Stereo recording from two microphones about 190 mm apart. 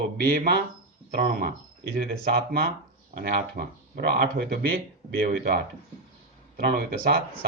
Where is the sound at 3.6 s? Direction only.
45° right (ahead or behind).